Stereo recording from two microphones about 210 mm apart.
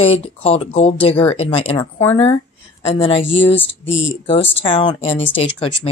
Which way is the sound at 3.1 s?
65° left (ahead or behind).